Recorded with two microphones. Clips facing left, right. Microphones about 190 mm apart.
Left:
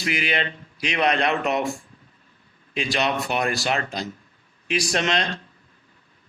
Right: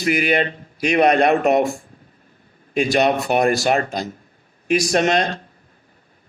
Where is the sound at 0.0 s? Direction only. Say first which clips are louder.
Right 7 dB; 45° right (ahead or behind).